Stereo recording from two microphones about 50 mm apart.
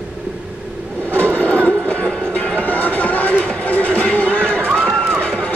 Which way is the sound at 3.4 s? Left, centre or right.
Left.